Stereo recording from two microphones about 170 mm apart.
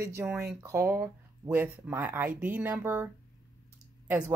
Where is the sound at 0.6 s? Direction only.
15° right (ahead or behind).